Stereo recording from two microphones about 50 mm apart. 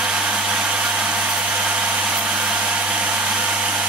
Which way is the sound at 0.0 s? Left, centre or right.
Right.